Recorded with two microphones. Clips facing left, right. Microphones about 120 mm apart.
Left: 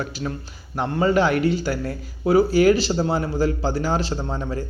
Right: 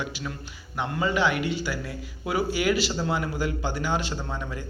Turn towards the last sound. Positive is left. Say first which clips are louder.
# left 6 dB
turn(degrees=35)  # may be behind; listen again after turning